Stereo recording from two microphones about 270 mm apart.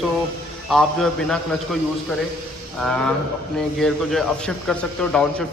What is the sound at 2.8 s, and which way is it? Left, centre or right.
A man's voice, centre.